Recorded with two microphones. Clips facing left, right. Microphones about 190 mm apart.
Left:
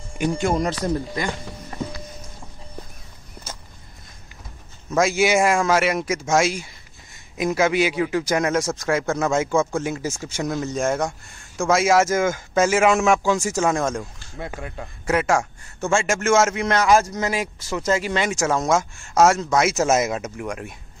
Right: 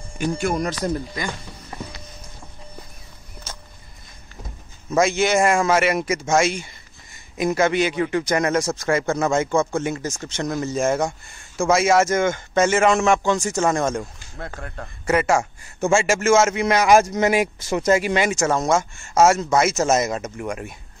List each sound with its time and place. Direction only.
0.2 s speech: 25° left (ahead or behind)
4.9 s speech: 5° left (ahead or behind)